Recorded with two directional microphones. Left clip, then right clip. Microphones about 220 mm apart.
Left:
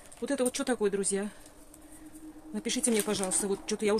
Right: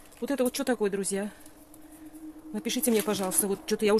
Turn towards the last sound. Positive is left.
turn(degrees=-30)  # may be behind; listen again after turning